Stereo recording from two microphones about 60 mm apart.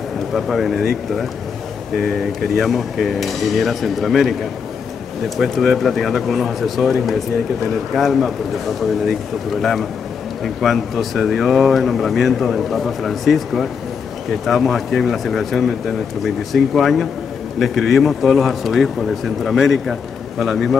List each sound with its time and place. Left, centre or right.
0.3 s speech: centre
5.4 s speech: centre